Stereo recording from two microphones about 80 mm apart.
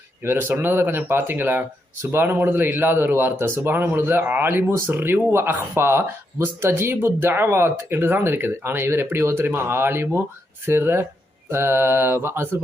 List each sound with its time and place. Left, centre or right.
0.3 s a man's voice: right
10.7 s mantra: right